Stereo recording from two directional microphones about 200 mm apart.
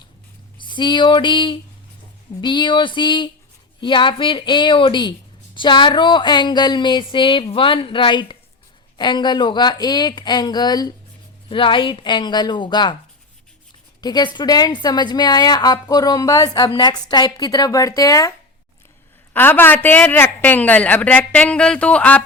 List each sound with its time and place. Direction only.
0.6 s a woman's voice: 25° left (ahead or behind)
14.0 s a woman's voice: 20° left (ahead or behind)
19.3 s a man's voice: 10° left (ahead or behind)